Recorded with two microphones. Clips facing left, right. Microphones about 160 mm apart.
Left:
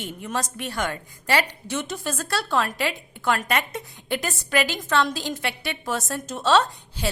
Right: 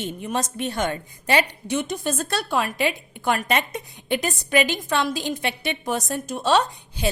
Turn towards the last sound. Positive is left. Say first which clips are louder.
# left 1 dB
turn(degrees=-15)  # may be behind; listen again after turning